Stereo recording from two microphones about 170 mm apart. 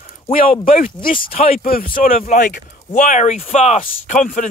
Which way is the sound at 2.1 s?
45° left (ahead or behind).